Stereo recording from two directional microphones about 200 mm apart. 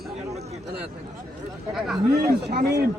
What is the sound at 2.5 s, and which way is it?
Speech, 50° right (ahead or behind).